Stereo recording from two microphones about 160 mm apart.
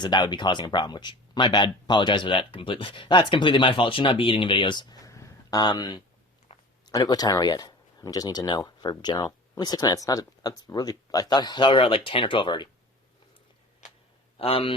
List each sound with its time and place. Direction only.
0.0 s speech: 30° left (ahead or behind)
6.5 s a sound: 40° left (ahead or behind)
6.8 s speech: 25° left (ahead or behind)
14.3 s a man's voice: 35° left (ahead or behind)